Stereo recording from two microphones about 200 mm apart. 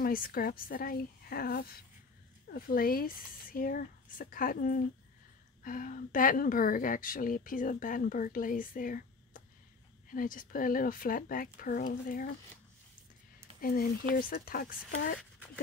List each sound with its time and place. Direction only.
0.0 s a woman's voice: 45° left (ahead or behind)
13.6 s a woman's voice: 45° left (ahead or behind)
15.1 s a sound: 5° left (ahead or behind)